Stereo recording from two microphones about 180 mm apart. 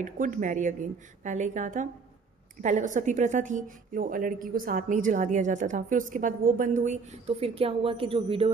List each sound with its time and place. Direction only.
0.0 s a woman's voice: 45° right (ahead or behind)